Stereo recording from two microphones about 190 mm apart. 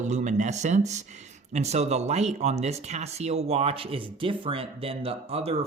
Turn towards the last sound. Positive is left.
turn(degrees=-30)  # may be behind; listen again after turning